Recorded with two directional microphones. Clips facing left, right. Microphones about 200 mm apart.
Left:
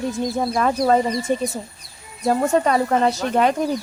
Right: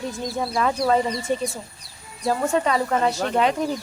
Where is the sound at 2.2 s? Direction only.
45° left (ahead or behind).